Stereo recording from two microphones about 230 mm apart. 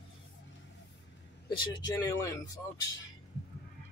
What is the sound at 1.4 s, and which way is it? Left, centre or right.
Speech, centre.